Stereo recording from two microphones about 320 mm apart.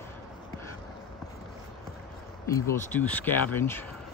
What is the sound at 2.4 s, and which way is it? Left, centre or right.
Speech, centre.